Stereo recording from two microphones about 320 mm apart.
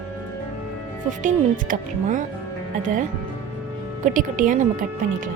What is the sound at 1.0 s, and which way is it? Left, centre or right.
Speech, right.